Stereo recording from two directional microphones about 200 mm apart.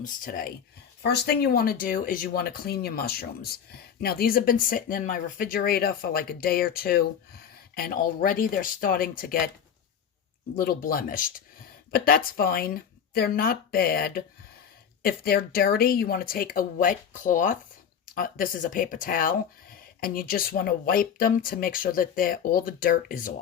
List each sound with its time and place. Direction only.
0.0 s speech: 45° left (ahead or behind)
10.6 s speech: 45° left (ahead or behind)